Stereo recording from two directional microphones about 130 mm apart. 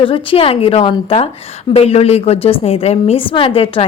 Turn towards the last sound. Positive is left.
turn(degrees=45)  # may be behind; listen again after turning